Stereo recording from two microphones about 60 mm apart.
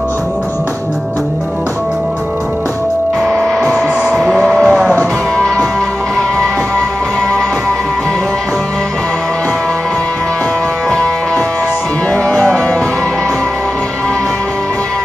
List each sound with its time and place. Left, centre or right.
3.3 s printer: centre
4.0 s music: centre
12.1 s music: centre